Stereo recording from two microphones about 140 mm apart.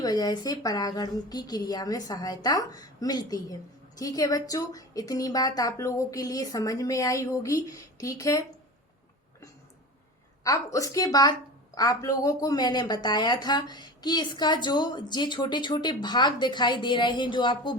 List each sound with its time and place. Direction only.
0.0 s a woman's voice: 30° left (ahead or behind)
10.4 s a woman's voice: 25° left (ahead or behind)